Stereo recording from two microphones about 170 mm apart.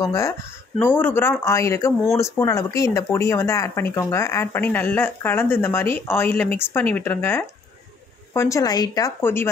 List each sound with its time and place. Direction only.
0.0 s a woman's voice: 20° left (ahead or behind)